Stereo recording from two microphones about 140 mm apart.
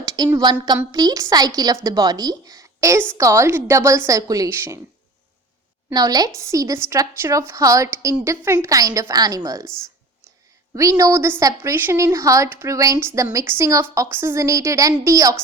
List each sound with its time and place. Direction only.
0.0 s a sound: 25° right (ahead or behind)
0.9 s a woman's voice: 25° right (ahead or behind)
5.9 s a woman's voice: 30° right (ahead or behind)
10.8 s a woman's voice: 25° right (ahead or behind)